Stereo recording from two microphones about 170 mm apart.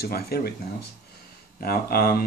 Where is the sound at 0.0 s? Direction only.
65° left (ahead or behind).